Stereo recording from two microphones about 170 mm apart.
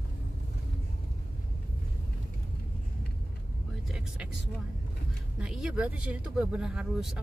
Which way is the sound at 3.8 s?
5° right (ahead or behind).